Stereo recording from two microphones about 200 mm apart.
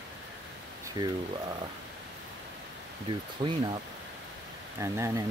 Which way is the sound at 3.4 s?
25° right (ahead or behind).